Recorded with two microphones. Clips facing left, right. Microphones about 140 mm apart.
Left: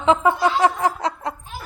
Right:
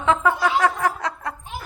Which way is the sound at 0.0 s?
20° left (ahead or behind).